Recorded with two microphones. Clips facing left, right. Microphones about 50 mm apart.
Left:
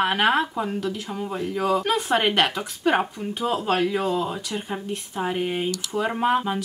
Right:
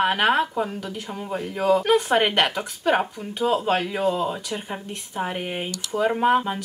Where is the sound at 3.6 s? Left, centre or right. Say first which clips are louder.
Even; centre.